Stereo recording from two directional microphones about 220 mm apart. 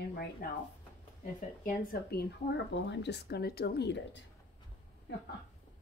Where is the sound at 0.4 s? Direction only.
40° left (ahead or behind).